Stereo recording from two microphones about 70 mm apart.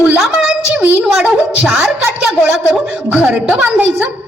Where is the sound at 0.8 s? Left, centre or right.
Right.